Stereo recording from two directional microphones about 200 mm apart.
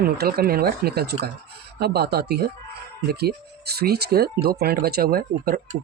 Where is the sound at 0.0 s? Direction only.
50° right (ahead or behind).